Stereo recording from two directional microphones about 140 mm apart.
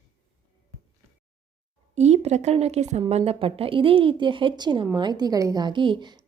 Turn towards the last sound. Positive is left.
turn(degrees=-30)  # may be behind; listen again after turning